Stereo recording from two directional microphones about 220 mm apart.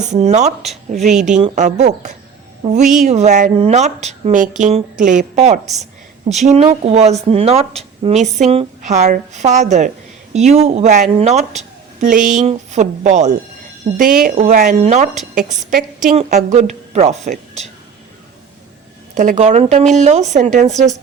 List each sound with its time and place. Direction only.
0.0 s a woman's voice: 30° right (ahead or behind)
15.1 s a woman's voice: centre (ahead or behind)
15.4 s a woman's voice: 30° right (ahead or behind)
19.1 s a woman's voice: 35° right (ahead or behind)